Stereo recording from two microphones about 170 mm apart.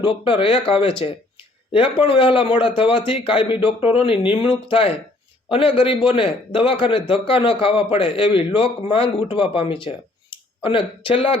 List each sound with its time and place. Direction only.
0.0 s speech: 30° left (ahead or behind)